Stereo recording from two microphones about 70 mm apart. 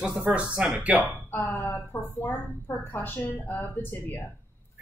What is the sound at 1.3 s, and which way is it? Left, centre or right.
A woman's voice, left.